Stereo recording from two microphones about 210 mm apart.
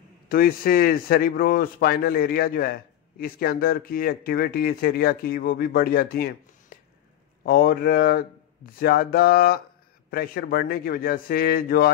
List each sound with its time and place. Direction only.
0.3 s speech: 45° left (ahead or behind)